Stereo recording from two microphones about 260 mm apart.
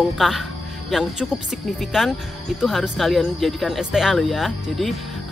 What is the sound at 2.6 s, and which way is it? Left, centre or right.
Speech, centre.